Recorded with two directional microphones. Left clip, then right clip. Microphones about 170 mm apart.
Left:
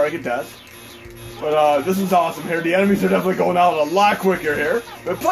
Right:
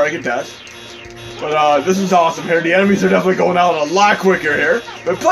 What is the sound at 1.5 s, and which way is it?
A man's voice, 20° right (ahead or behind).